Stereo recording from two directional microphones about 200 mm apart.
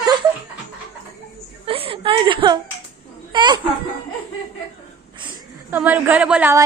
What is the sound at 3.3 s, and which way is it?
Speech, 20° right (ahead or behind).